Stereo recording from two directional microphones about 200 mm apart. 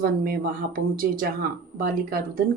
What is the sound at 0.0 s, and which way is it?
Speech, 50° right (ahead or behind).